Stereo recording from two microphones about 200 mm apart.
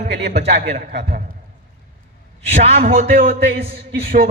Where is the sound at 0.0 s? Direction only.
55° right (ahead or behind).